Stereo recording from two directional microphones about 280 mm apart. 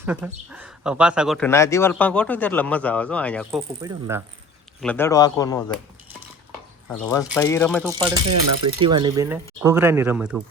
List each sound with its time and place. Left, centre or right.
0.0 s speech: centre
3.8 s speech: centre
4.8 s speech: centre
6.8 s speech: centre
7.9 s speech: centre
8.3 s speech: right
8.8 s speech: centre